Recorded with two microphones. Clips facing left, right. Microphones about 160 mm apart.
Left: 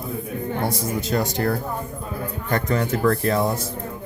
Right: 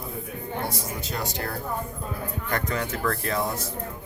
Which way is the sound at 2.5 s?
30° left (ahead or behind).